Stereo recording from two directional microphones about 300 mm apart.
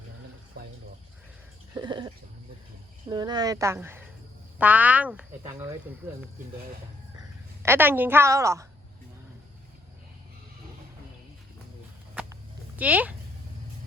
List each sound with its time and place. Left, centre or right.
1.7 s a sound: centre
3.1 s a woman's voice: centre
7.6 s a woman's voice: centre
12.1 s walk: centre